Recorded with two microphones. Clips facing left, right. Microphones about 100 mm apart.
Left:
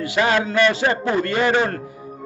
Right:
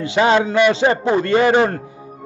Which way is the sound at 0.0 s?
25° right (ahead or behind).